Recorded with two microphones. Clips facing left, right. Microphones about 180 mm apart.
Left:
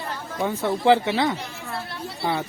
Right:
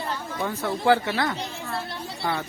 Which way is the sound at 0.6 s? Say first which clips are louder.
Left 3 dB; 20° left (ahead or behind).